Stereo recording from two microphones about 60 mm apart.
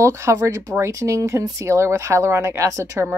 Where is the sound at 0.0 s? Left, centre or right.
Right.